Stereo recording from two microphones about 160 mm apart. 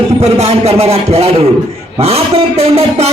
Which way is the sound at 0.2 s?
40° right (ahead or behind).